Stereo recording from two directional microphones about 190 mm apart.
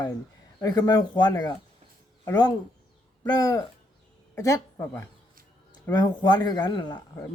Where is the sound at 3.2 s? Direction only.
20° left (ahead or behind).